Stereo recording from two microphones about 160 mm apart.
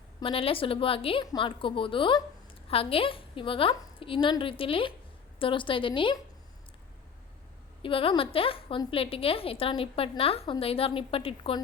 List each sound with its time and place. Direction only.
0.2 s a woman's voice: 35° left (ahead or behind)
7.8 s a woman's voice: 35° left (ahead or behind)